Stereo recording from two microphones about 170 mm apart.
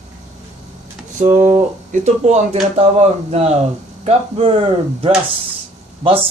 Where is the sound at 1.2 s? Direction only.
45° right (ahead or behind).